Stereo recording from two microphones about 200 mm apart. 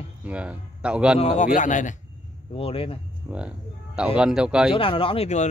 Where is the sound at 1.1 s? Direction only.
35° left (ahead or behind).